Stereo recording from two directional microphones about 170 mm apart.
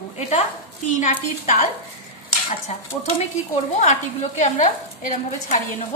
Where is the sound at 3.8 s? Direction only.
45° left (ahead or behind).